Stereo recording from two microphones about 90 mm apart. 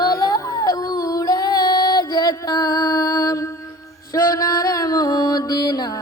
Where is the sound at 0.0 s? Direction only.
45° left (ahead or behind).